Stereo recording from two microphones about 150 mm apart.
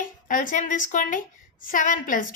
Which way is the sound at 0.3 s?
60° left (ahead or behind).